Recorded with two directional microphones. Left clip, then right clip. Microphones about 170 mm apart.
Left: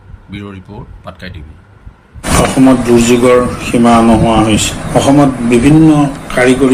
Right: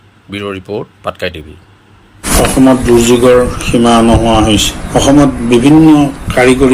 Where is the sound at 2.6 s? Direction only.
45° right (ahead or behind).